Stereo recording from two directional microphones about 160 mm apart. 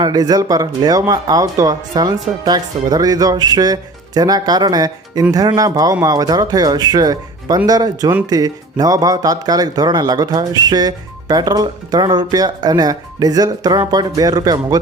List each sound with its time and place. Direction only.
0.0 s speech: 25° right (ahead or behind)